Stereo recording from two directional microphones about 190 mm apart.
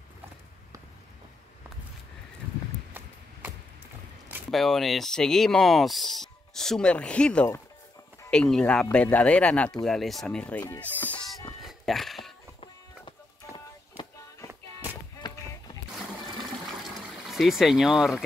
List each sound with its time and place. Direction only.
4.5 s speech: centre (ahead or behind)
10.6 s music: 10° left (ahead or behind)
15.2 s run: 25° left (ahead or behind)
17.3 s speech: centre (ahead or behind)